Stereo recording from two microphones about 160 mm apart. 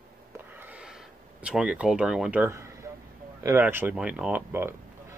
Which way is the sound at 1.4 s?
5° right (ahead or behind).